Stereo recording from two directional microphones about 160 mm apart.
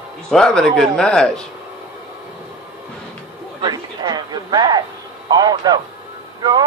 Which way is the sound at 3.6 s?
25° right (ahead or behind).